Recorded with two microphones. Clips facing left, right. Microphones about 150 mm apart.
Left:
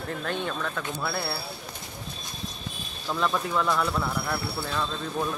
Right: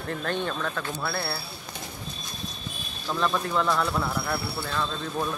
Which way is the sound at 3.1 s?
Centre (ahead or behind).